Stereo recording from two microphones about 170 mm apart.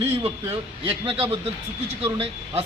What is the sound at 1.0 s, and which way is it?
Speech, 35° right (ahead or behind).